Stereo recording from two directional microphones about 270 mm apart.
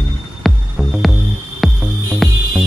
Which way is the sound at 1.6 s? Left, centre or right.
Centre.